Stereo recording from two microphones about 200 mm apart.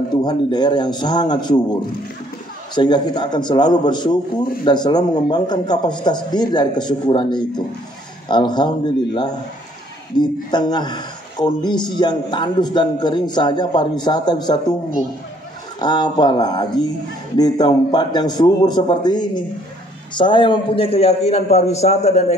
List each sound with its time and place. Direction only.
0.1 s speech: 20° left (ahead or behind)
15.8 s a man's voice: 20° left (ahead or behind)